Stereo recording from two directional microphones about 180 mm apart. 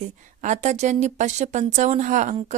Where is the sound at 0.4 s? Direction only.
40° right (ahead or behind).